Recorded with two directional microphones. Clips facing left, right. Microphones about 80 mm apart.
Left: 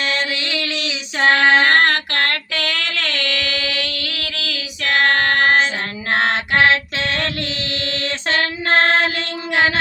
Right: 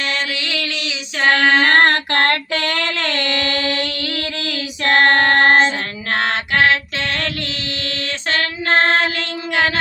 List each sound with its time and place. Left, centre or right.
1.2 s female singing: centre
1.7 s female singing: right
4.8 s child singing: right